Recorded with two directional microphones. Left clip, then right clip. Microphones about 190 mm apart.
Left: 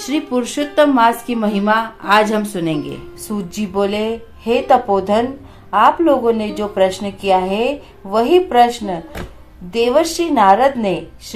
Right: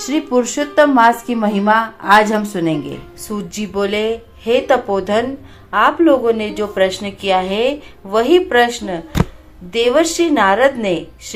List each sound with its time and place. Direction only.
0.0 s a woman's voice: 10° right (ahead or behind)
3.2 s a woman's voice: 20° right (ahead or behind)